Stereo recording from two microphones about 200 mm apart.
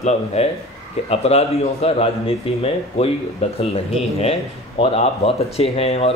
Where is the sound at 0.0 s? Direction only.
30° left (ahead or behind).